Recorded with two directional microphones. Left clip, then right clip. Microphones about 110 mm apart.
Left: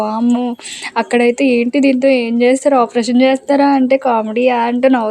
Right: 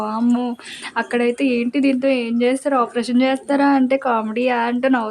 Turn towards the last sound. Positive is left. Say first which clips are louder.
# left 6 dB
turn(degrees=40)  # may be behind; listen again after turning